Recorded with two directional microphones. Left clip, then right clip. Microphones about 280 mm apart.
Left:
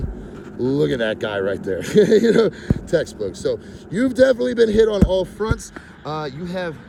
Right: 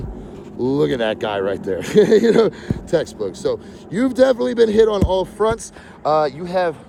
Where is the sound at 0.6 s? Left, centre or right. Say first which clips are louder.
Right 1 dB; centre.